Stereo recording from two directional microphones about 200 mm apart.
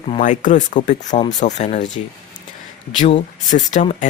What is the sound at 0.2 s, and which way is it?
Speech, 40° left (ahead or behind).